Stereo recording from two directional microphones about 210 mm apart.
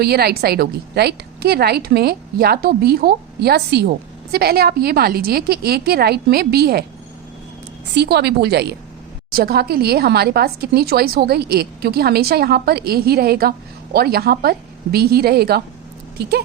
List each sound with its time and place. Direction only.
0.0 s a woman's voice: 50° right (ahead or behind)
7.9 s a woman's voice: 50° right (ahead or behind)